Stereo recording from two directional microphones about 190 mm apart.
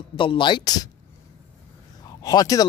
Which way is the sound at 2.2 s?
20° left (ahead or behind).